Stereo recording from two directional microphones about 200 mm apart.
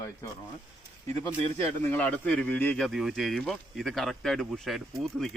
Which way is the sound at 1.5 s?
10° left (ahead or behind).